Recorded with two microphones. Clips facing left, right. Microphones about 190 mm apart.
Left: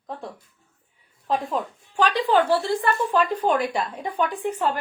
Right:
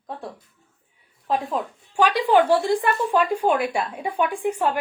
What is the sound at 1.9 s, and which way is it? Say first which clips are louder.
A woman's voice: right 2 dB; 10° right (ahead or behind).